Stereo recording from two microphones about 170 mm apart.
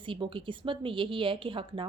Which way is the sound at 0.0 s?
30° right (ahead or behind).